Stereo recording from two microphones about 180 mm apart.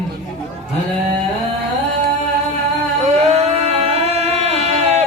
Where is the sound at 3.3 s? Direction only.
35° right (ahead or behind).